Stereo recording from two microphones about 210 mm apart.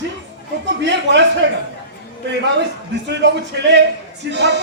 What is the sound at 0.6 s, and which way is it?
Speech, 55° right (ahead or behind).